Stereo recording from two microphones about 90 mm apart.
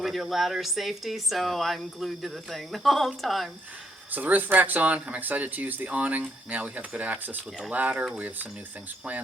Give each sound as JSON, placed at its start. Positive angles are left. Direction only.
{"t": 0.0, "sound": "speech", "side_deg": 0}
{"t": 4.1, "sound": "speech", "side_deg": -20}